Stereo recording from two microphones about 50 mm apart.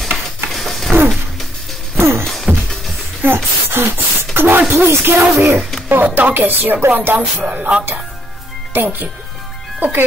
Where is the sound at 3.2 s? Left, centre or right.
Right.